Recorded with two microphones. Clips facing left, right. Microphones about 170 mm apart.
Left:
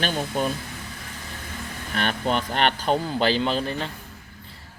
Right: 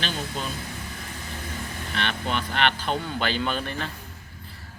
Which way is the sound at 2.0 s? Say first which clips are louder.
Left 4 dB; 40° left (ahead or behind).